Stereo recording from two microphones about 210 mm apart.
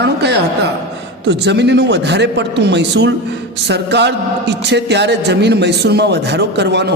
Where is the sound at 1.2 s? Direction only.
55° right (ahead or behind).